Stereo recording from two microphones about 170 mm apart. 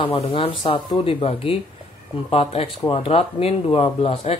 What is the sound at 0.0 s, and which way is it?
Speech, 35° left (ahead or behind).